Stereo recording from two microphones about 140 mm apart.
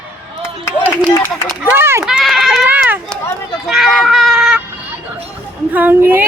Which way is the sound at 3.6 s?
Centre (ahead or behind).